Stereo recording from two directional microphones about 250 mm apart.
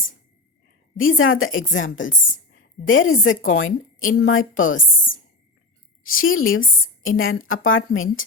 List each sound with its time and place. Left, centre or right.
0.9 s a woman's voice: left
6.0 s a woman's voice: left